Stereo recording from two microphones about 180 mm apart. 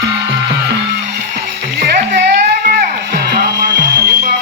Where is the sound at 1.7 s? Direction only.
70° right (ahead or behind).